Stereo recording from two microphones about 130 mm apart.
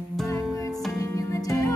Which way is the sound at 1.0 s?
25° left (ahead or behind).